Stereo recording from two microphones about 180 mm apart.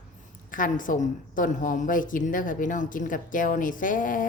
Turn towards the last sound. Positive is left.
turn(degrees=50)  # may be behind; listen again after turning